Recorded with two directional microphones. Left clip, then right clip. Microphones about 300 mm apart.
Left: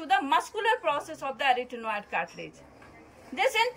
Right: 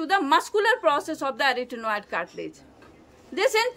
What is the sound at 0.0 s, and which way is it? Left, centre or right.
A woman's voice, centre.